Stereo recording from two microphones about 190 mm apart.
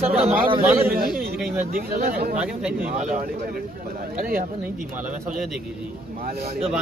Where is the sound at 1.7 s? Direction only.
55° right (ahead or behind).